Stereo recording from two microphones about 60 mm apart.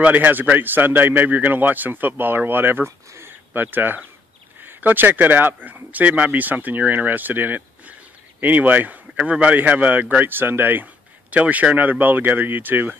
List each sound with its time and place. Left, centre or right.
0.0 s speech: right
3.3 s a sound: right
4.6 s a man's voice: right